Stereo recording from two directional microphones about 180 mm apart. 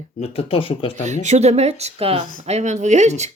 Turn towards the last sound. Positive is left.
turn(degrees=-40)  # may be behind; listen again after turning